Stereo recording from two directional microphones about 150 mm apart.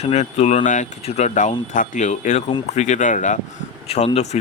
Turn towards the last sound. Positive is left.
turn(degrees=45)  # may be behind; listen again after turning